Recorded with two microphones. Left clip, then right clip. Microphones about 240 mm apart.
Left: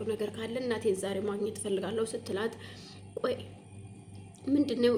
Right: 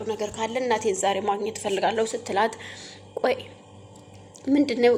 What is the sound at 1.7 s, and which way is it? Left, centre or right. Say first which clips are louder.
Speech: right 11 dB; right.